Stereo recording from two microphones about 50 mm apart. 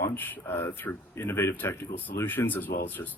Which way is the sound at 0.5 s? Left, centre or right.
Left.